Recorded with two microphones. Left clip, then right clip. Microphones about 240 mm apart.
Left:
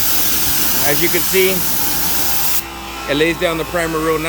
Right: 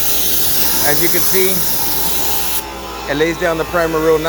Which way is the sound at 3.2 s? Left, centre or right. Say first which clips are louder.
Right 1 dB; centre.